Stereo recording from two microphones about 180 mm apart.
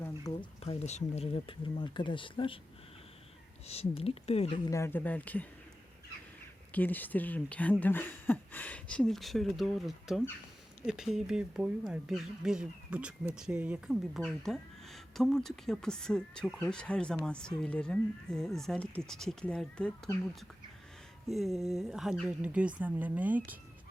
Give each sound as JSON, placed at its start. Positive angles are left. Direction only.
{"t": 0.3, "sound": "speech", "side_deg": 20}
{"t": 0.6, "sound": "speech", "side_deg": 35}
{"t": 3.7, "sound": "speech", "side_deg": 35}
{"t": 6.7, "sound": "speech", "side_deg": 10}
{"t": 21.2, "sound": "speech", "side_deg": 0}